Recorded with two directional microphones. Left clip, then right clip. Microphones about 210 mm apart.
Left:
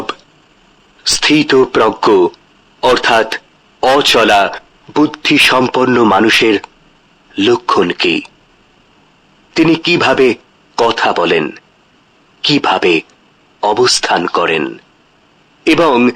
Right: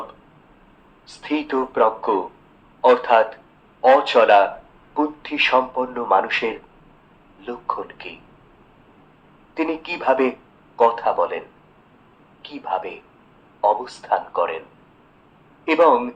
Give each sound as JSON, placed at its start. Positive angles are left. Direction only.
{"t": 1.0, "sound": "speech", "side_deg": 50}
{"t": 9.6, "sound": "a man's voice", "side_deg": 45}
{"t": 15.6, "sound": "speech", "side_deg": 45}